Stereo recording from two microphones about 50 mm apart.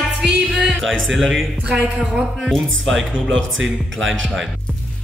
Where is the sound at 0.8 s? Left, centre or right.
Centre.